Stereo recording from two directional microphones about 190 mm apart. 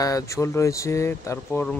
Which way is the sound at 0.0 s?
15° left (ahead or behind).